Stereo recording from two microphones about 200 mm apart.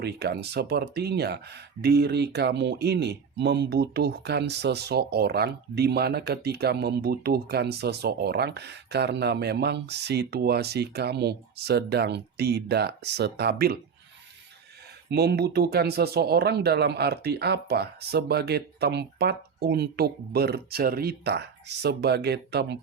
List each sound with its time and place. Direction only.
0.0 s speech: 55° right (ahead or behind)
15.1 s speech: 55° right (ahead or behind)